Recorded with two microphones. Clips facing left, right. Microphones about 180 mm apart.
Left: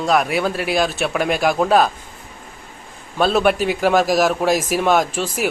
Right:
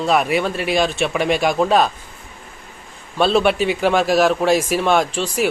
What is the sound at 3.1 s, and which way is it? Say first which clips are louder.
Speech: even; 5° left (ahead or behind).